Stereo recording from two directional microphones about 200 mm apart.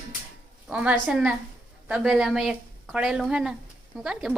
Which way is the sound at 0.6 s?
5° right (ahead or behind).